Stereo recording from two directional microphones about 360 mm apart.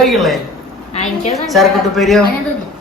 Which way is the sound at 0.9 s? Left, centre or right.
Centre.